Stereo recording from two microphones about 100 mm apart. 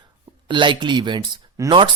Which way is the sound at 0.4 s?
55° right (ahead or behind).